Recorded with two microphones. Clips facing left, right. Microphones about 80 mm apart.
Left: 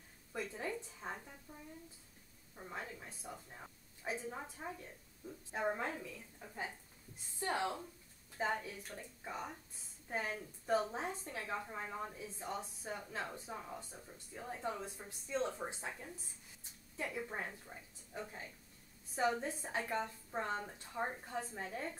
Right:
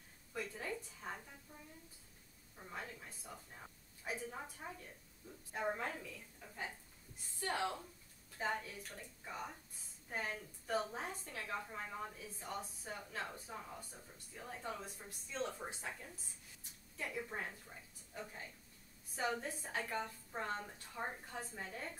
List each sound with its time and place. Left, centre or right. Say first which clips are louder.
0.3 s a sound: left 2 dB; centre
2.5 s a woman's voice: left 2 dB; centre
13.7 s speech: left 3 dB; left
16.9 s a woman's voice: left 2 dB; centre